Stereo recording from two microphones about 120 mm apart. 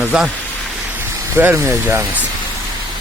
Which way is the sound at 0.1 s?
5° right (ahead or behind).